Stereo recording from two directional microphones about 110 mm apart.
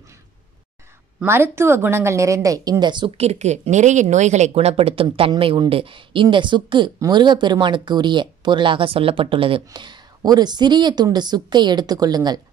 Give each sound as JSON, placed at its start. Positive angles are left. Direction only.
{"t": 1.2, "sound": "a woman's voice", "side_deg": -20}
{"t": 3.2, "sound": "speech", "side_deg": -80}
{"t": 9.7, "sound": "a woman's voice", "side_deg": -40}